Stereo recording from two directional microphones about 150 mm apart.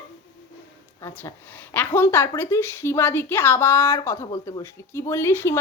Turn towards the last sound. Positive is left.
turn(degrees=15)  # may be behind; listen again after turning